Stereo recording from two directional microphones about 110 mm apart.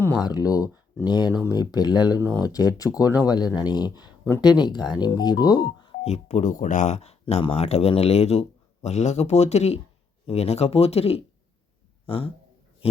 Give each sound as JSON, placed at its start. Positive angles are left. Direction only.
{"t": 0.3, "sound": "speech", "side_deg": 35}
{"t": 6.0, "sound": "speech", "side_deg": 75}